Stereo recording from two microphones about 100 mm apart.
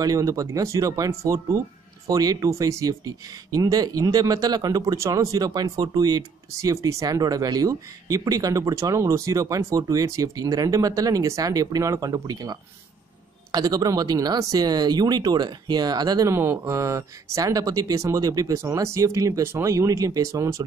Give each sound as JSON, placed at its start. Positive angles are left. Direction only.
{"t": 0.0, "sound": "speech", "side_deg": -35}
{"t": 16.3, "sound": "speech", "side_deg": -25}